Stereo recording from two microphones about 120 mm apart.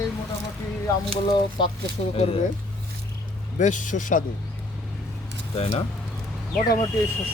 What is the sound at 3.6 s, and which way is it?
Speech, 90° left.